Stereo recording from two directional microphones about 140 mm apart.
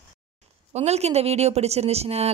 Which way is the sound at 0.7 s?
50° right (ahead or behind).